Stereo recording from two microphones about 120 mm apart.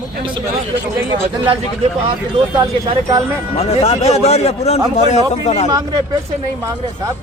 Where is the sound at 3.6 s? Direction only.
60° left (ahead or behind).